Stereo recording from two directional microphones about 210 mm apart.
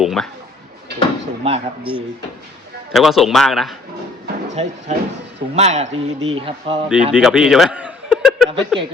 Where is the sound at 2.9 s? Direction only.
Centre (ahead or behind).